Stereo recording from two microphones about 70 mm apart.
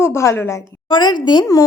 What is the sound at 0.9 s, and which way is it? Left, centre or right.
Speech, left.